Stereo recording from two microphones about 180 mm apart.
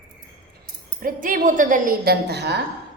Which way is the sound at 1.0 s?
50° right (ahead or behind).